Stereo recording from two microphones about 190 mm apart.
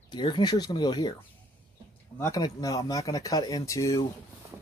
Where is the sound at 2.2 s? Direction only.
20° left (ahead or behind).